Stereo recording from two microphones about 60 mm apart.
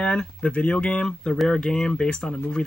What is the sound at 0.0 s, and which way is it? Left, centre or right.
Speech, centre.